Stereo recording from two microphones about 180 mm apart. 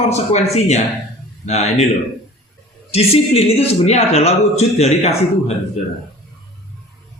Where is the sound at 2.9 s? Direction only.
35° left (ahead or behind).